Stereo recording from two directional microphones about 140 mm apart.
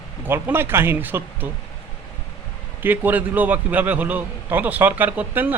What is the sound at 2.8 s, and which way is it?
A man's voice, 15° right (ahead or behind).